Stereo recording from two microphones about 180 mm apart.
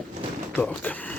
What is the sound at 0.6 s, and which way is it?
Speech, 10° left (ahead or behind).